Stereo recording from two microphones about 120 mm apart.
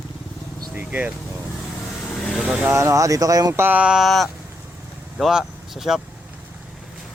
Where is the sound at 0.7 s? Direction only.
15° right (ahead or behind).